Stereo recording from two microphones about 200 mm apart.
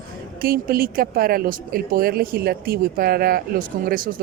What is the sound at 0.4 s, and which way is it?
A woman's voice, 45° right (ahead or behind).